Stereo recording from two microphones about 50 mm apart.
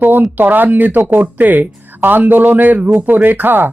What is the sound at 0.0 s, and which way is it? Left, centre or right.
Speech, right.